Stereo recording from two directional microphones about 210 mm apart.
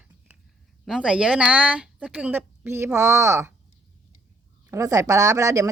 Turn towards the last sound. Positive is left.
turn(degrees=-15)  # may be behind; listen again after turning